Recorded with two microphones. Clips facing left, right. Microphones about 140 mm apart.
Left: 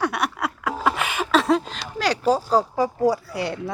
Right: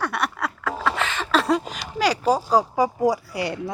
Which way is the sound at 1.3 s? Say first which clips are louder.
Left 2 dB; centre (ahead or behind).